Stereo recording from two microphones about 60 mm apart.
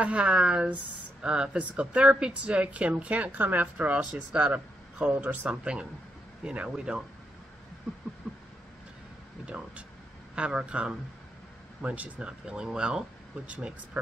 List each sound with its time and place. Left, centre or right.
0.0 s speech: centre
4.5 s speech: right
5.6 s speech: centre
10.3 s speech: centre